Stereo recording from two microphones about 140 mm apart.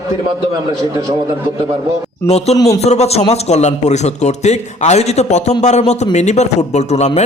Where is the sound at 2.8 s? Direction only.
50° left (ahead or behind).